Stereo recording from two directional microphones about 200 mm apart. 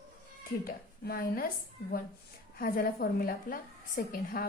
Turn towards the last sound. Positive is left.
turn(degrees=45)  # may be behind; listen again after turning